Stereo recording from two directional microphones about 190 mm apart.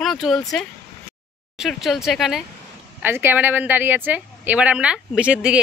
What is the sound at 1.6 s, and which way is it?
A woman's voice, centre (ahead or behind).